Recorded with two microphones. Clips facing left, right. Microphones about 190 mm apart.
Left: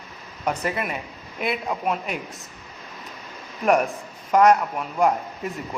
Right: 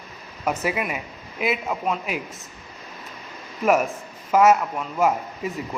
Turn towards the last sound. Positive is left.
turn(degrees=0)  # may be behind; listen again after turning